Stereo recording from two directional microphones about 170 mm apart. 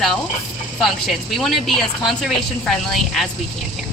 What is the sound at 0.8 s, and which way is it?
Speech, centre (ahead or behind).